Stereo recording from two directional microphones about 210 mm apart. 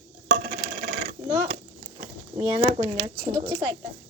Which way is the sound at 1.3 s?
35° right (ahead or behind).